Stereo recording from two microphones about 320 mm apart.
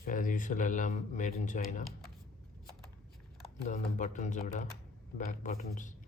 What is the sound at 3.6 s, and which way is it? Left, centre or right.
Speech, left.